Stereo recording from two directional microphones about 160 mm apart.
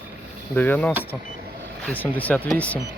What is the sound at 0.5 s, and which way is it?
Speech, 10° left (ahead or behind).